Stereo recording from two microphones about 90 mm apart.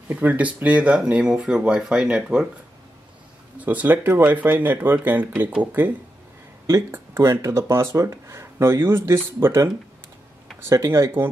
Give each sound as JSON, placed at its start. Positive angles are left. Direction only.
{"t": 0.1, "sound": "speech", "side_deg": -20}
{"t": 3.5, "sound": "speech", "side_deg": -20}
{"t": 6.9, "sound": "speech", "side_deg": -30}